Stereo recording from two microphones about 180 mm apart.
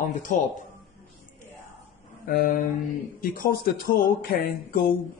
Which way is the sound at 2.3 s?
50° left (ahead or behind).